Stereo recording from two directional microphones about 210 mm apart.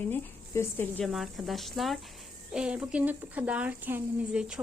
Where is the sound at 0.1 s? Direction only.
10° left (ahead or behind).